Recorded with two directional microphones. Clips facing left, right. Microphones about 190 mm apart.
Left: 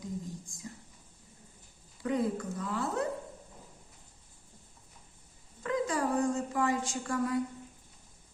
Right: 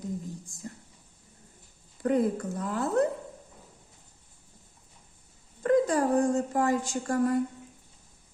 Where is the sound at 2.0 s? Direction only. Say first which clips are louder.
Right 5 dB; 50° right (ahead or behind).